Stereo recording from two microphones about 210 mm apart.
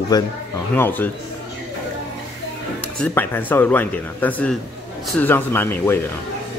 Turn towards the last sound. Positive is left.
turn(degrees=10)  # may be behind; listen again after turning